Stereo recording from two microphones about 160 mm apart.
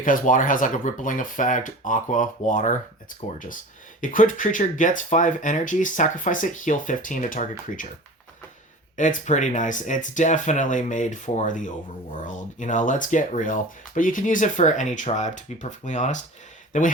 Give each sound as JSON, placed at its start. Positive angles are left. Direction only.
{"t": 0.0, "sound": "speech", "side_deg": 55}
{"t": 9.0, "sound": "speech", "side_deg": 50}